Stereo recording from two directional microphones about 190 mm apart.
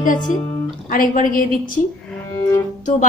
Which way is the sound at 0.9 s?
45° left (ahead or behind).